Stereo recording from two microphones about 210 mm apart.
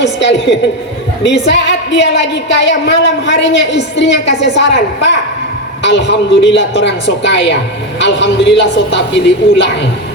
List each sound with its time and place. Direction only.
0.0 s a woman's voice: 55° left (ahead or behind)